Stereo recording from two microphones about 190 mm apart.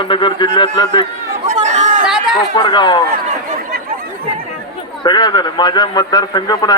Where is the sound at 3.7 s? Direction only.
55° right (ahead or behind).